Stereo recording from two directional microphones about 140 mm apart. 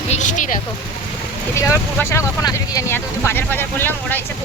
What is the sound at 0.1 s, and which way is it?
Speech, 60° left (ahead or behind).